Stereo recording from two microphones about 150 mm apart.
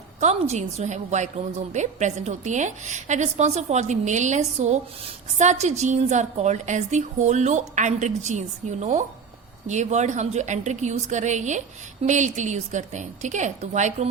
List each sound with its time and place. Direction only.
0.2 s a woman's voice: 50° right (ahead or behind)